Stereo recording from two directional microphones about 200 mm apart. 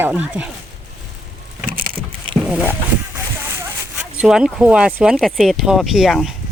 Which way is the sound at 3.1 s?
15° right (ahead or behind).